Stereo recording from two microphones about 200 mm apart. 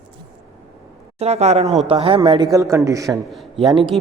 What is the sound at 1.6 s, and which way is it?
Speech, centre (ahead or behind).